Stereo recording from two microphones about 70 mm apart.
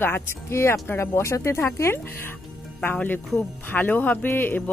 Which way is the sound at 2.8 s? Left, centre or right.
Left.